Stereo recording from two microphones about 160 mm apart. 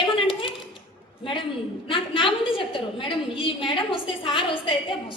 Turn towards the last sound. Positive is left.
turn(degrees=35)  # may be behind; listen again after turning